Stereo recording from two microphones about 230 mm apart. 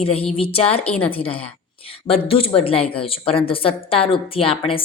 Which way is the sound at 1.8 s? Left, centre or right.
Left.